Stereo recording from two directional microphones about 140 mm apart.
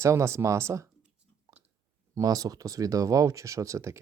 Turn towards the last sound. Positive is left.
turn(degrees=-20)  # may be behind; listen again after turning